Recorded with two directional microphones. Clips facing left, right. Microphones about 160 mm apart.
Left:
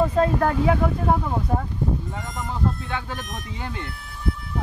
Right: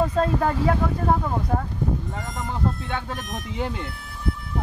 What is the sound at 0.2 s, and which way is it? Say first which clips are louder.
Speech: left 2 dB; 5° left (ahead or behind).